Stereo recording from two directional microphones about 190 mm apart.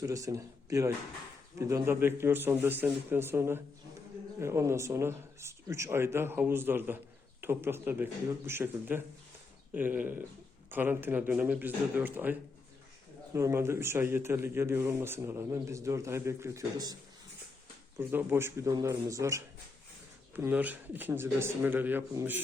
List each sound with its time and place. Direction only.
0.0 s speech: 15° right (ahead or behind)